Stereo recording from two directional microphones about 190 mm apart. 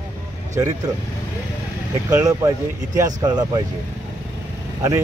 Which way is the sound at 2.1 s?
15° right (ahead or behind).